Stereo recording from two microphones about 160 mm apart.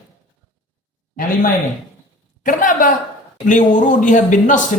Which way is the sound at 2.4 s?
55° left (ahead or behind).